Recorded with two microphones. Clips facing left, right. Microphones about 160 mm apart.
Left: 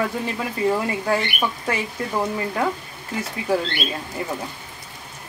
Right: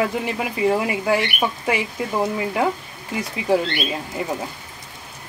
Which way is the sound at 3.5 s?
15° right (ahead or behind).